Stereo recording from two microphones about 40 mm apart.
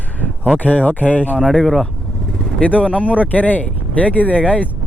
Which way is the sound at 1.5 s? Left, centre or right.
Centre.